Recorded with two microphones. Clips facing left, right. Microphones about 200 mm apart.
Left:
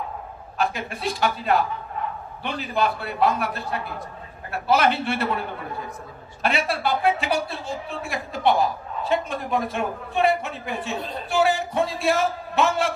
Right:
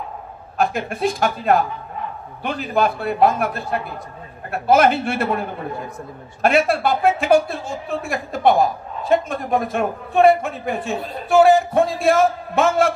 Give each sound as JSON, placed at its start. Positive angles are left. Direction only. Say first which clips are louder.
{"t": 0.6, "sound": "a man's voice", "louder": "right 6 dB", "side_deg": -50}
{"t": 6.4, "sound": "a man's voice", "louder": "right 7 dB", "side_deg": -50}